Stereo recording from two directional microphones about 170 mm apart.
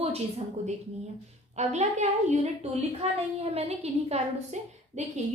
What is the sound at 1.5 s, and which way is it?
A woman's voice, 40° right (ahead or behind).